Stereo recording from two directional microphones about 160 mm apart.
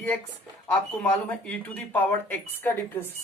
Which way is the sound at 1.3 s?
10° left (ahead or behind).